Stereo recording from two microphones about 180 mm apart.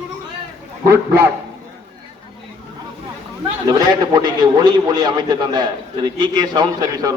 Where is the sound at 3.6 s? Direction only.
20° right (ahead or behind).